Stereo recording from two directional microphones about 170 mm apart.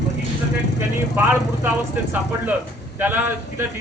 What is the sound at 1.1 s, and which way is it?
Speech, 15° right (ahead or behind).